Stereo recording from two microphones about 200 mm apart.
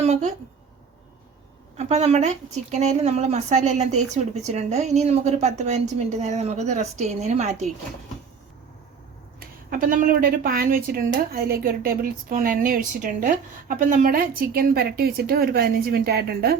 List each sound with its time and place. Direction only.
0.0 s a woman's voice: 35° right (ahead or behind)
1.8 s a woman's voice: 35° right (ahead or behind)
9.4 s a woman's voice: 45° right (ahead or behind)